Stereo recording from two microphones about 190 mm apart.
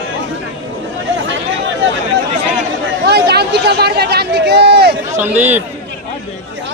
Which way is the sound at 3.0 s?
60° right (ahead or behind).